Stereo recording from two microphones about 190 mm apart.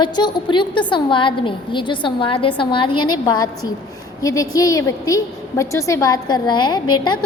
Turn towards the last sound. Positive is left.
turn(degrees=25)  # may be behind; listen again after turning